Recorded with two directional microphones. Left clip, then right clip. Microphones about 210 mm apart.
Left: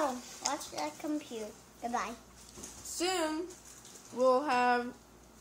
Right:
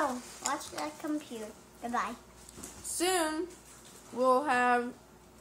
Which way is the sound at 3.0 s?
5° right (ahead or behind).